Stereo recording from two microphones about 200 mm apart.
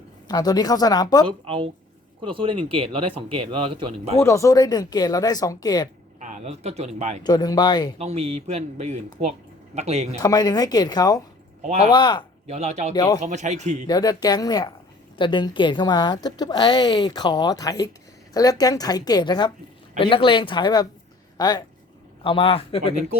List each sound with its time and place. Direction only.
0.3 s a woman's voice: 20° left (ahead or behind)
1.3 s speech: 25° right (ahead or behind)
4.2 s a woman's voice: 15° left (ahead or behind)
6.1 s speech: 35° right (ahead or behind)
7.3 s a woman's voice: 20° left (ahead or behind)
7.9 s speech: 30° right (ahead or behind)
10.2 s a woman's voice: 20° left (ahead or behind)
12.5 s speech: 35° right (ahead or behind)
12.9 s a woman's voice: 20° left (ahead or behind)
13.2 s speech: 35° right (ahead or behind)
13.8 s a woman's voice: 20° left (ahead or behind)